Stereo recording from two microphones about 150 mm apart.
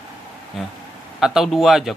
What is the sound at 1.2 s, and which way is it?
Speech, centre (ahead or behind).